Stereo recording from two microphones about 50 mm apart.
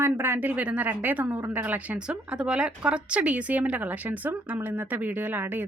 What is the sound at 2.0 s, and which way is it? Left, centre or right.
Speech, centre.